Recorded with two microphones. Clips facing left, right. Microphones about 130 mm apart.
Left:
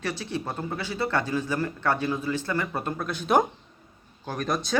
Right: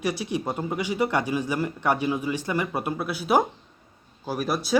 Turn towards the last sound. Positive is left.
turn(degrees=-10)  # may be behind; listen again after turning